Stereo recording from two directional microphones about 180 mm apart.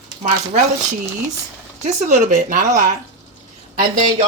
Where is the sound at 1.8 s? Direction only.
40° right (ahead or behind).